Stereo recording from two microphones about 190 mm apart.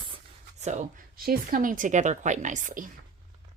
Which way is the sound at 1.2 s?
50° right (ahead or behind).